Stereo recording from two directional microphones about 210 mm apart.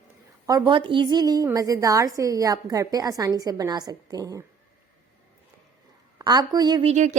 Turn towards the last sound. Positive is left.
turn(degrees=-35)  # may be behind; listen again after turning